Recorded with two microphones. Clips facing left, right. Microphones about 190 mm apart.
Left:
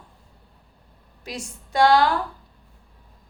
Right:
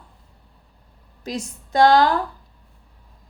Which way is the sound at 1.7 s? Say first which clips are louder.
Right 2 dB; 40° right (ahead or behind).